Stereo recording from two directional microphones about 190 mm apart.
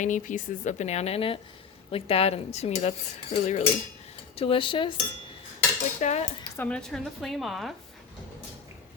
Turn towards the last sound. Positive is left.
turn(degrees=0)  # may be behind; listen again after turning